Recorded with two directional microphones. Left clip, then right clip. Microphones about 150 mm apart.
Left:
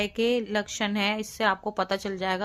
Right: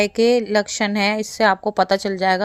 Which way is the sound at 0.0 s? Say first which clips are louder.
Right 9 dB; 40° right (ahead or behind).